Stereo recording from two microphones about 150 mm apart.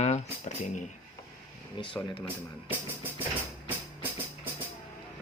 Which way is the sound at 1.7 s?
35° left (ahead or behind).